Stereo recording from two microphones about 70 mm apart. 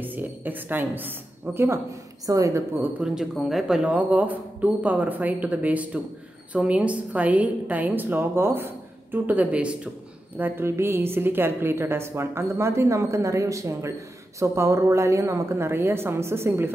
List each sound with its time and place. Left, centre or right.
0.0 s a woman's voice: right
2.2 s a woman's voice: right
3.0 s a woman's voice: centre
10.3 s a woman's voice: right